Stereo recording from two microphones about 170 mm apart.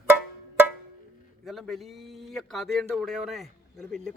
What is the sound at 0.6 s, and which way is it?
Music, 15° right (ahead or behind).